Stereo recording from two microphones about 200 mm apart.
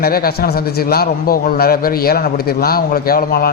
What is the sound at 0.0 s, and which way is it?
A man's voice, 50° left (ahead or behind).